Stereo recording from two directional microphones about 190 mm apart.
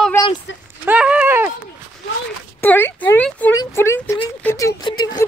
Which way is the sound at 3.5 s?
15° left (ahead or behind).